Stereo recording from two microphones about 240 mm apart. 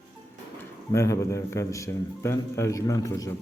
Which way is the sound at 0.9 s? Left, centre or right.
Centre.